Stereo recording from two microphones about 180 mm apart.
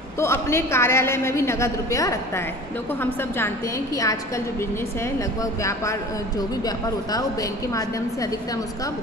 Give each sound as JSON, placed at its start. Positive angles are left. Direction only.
{"t": 0.2, "sound": "a woman's voice", "side_deg": 15}